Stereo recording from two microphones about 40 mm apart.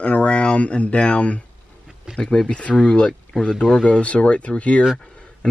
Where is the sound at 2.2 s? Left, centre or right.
Left.